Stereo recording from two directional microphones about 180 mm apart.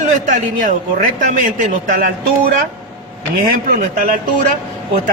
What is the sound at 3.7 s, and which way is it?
Speech, 45° right (ahead or behind).